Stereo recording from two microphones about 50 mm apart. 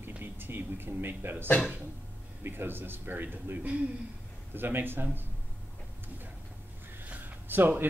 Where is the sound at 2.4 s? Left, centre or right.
Right.